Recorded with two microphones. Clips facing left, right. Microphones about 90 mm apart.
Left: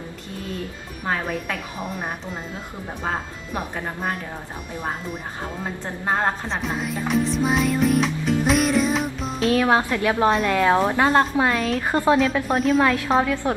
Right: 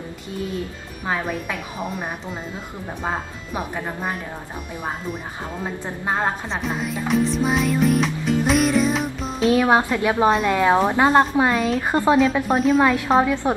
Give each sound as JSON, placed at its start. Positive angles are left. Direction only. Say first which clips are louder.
{"t": 1.0, "sound": "speech", "louder": "right 1 dB", "side_deg": -5}
{"t": 6.0, "sound": "music", "louder": "left 1 dB", "side_deg": -5}
{"t": 9.5, "sound": "a woman's voice", "louder": "right 2 dB", "side_deg": -20}
{"t": 12.4, "sound": "speech", "louder": "right 2 dB", "side_deg": 0}
{"t": 12.8, "sound": "a woman's voice", "louder": "right 2 dB", "side_deg": -20}